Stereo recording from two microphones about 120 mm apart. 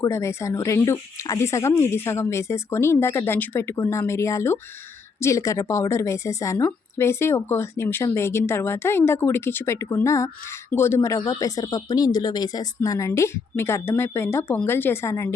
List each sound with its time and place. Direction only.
0.0 s a woman's voice: 25° left (ahead or behind)